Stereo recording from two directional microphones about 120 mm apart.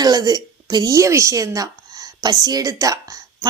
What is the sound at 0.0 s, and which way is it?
A woman's voice, 30° right (ahead or behind).